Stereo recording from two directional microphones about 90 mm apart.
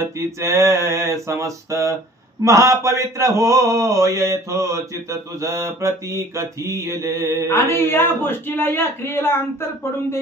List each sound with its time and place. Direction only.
0.0 s mantra: 30° right (ahead or behind)
7.4 s a man's voice: 30° left (ahead or behind)